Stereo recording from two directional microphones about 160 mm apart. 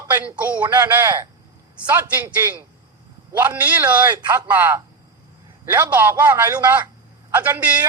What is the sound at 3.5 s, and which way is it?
A man's voice, 10° right (ahead or behind).